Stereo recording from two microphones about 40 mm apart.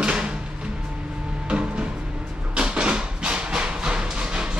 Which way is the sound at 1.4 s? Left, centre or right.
Right.